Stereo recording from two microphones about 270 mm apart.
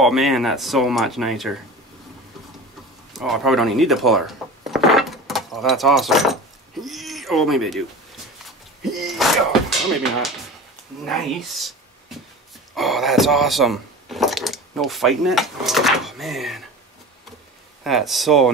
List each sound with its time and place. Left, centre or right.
0.0 s speech: centre
3.1 s speech: centre
6.8 s a sound: centre
11.1 s speech: centre
17.8 s speech: centre